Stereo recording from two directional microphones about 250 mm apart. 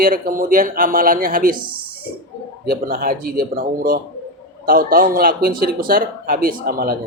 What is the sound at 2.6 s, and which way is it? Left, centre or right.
Speech, right.